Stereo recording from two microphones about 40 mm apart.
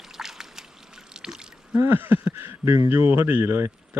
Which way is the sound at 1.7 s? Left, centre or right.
Right.